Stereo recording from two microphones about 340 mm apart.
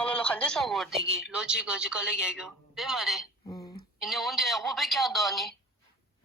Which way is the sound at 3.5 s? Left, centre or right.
Centre.